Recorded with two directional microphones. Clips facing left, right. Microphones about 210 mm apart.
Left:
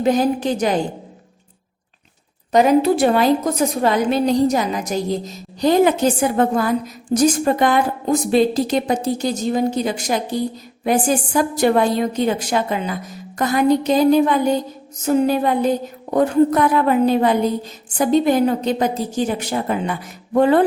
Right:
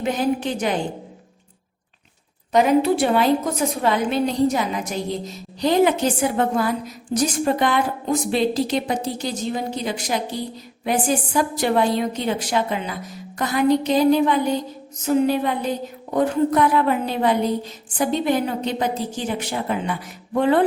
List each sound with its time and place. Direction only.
0.0 s a woman's voice: 40° left (ahead or behind)
2.5 s a woman's voice: 40° left (ahead or behind)
11.3 s a woman's voice: 45° left (ahead or behind)